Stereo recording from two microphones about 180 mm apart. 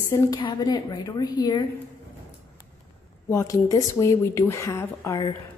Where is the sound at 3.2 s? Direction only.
15° left (ahead or behind).